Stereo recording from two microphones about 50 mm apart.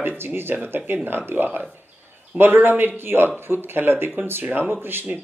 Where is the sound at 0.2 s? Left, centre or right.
Right.